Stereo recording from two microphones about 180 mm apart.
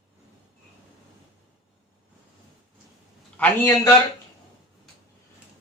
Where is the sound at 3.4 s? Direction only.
15° left (ahead or behind).